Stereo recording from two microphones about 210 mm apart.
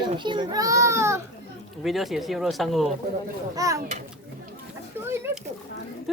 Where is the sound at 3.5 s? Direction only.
15° right (ahead or behind).